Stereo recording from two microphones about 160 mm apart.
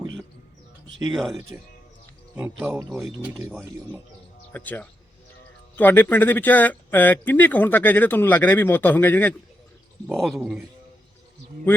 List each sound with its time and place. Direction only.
1.1 s speech: centre (ahead or behind); by 3.6 s 15° right (ahead or behind)
4.5 s speech: 10° left (ahead or behind)
10.2 s speech: centre (ahead or behind)